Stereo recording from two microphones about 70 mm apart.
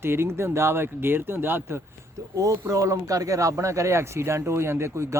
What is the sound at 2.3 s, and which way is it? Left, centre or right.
Speech, right.